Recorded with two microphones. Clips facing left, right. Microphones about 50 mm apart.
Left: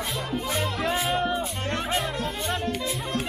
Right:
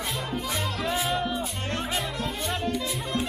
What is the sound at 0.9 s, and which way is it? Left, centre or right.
Speech, centre.